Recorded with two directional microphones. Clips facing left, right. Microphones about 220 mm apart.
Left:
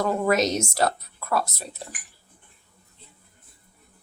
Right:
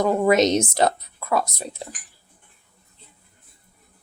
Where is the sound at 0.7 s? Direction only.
20° right (ahead or behind).